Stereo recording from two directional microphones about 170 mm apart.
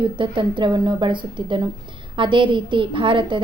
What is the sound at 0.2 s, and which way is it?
A woman's voice, 30° right (ahead or behind).